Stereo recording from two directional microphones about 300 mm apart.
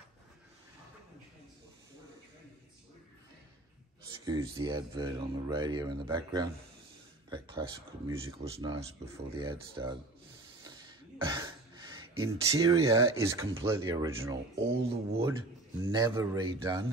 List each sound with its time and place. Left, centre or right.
4.2 s speech: centre
7.2 s a sound: centre
8.1 s speech: centre
11.1 s speech: centre